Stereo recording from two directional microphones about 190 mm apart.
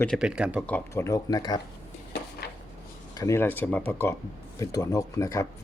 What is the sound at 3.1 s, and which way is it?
Speech, 20° left (ahead or behind).